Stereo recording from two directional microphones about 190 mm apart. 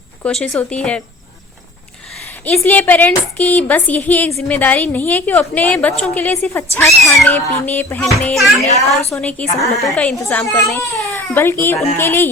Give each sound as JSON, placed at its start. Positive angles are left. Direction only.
{"t": 0.2, "sound": "speech", "side_deg": 5}
{"t": 2.4, "sound": "a woman's voice", "side_deg": 10}
{"t": 8.6, "sound": "a woman's voice", "side_deg": 35}
{"t": 9.1, "sound": "a woman's voice", "side_deg": 10}